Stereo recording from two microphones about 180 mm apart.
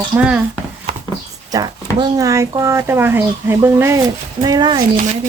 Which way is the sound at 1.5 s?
25° right (ahead or behind).